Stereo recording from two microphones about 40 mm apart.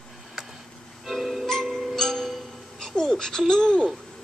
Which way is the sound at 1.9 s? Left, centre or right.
Centre.